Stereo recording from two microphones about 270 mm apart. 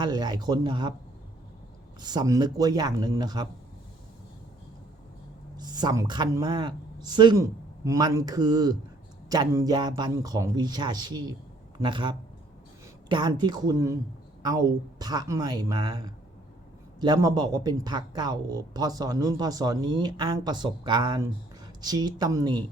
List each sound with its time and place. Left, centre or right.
0.0 s speech: centre
2.0 s speech: centre
5.5 s speech: centre